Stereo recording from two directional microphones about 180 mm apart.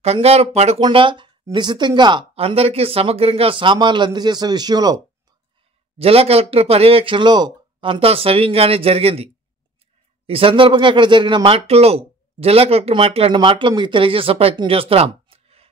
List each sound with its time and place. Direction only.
0.0 s speech: 35° right (ahead or behind)
5.9 s speech: 35° right (ahead or behind)